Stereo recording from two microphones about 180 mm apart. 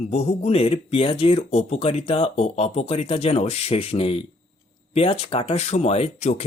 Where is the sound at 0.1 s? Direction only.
35° left (ahead or behind).